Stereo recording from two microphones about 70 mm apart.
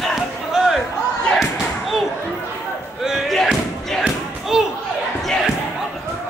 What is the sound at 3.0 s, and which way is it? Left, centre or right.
Slam, centre.